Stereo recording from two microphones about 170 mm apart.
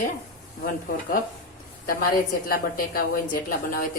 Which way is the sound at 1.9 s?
55° left (ahead or behind).